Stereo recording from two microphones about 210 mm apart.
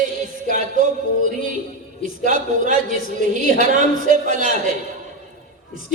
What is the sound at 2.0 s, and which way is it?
A woman's voice, 40° right (ahead or behind).